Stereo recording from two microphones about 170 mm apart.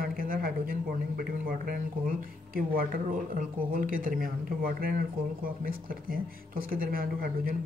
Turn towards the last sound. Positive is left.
turn(degrees=-60)  # may be behind; listen again after turning